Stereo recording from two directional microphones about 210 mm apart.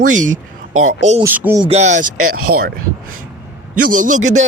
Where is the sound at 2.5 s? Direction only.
50° right (ahead or behind).